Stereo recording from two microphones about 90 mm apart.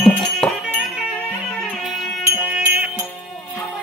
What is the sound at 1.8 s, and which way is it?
Music, centre (ahead or behind).